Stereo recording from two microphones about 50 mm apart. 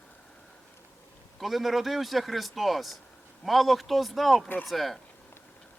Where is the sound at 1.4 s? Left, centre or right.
Centre.